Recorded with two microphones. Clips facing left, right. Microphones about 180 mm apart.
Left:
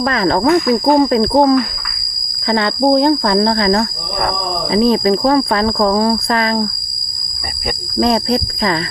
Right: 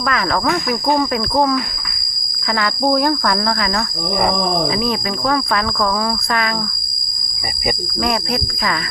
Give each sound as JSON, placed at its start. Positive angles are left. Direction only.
{"t": 0.0, "sound": "speech", "side_deg": 30}
{"t": 7.9, "sound": "speech", "side_deg": 30}